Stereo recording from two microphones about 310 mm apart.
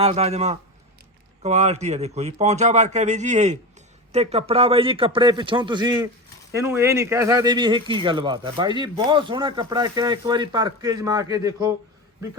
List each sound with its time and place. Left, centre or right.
0.0 s a man's voice: centre